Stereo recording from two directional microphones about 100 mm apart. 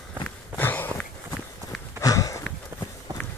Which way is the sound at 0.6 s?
20° left (ahead or behind).